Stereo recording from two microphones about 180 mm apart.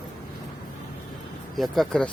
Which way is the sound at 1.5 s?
Centre (ahead or behind).